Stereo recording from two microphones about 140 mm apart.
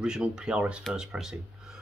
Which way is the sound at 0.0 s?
5° right (ahead or behind).